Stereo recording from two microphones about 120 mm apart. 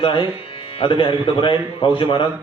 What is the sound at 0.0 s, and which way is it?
Speech, 45° left (ahead or behind).